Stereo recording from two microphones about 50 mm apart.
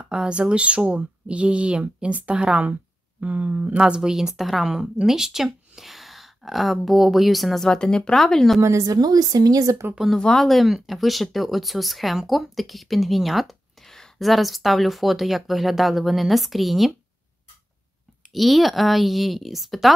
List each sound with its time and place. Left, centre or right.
0.0 s speech: centre
3.2 s speech: right
3.7 s a woman's voice: centre
7.6 s speech: centre
8.5 s a woman's voice: right
10.1 s speech: centre
18.3 s speech: centre